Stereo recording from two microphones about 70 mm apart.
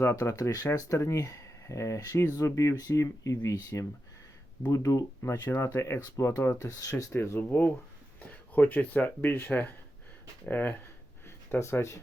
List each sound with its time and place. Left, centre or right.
0.2 s speech: left
6.0 s speech: left
6.4 s speech: left
7.1 s speech: left
11.6 s speech: left